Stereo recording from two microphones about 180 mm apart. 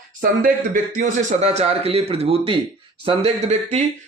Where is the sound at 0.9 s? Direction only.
45° right (ahead or behind).